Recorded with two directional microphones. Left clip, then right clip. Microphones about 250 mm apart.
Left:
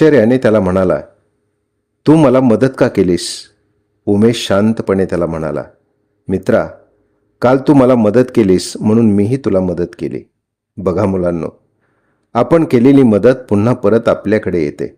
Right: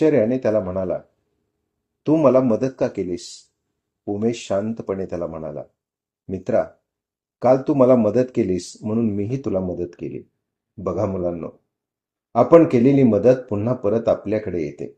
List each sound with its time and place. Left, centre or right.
0.0 s speech: left
2.0 s speech: left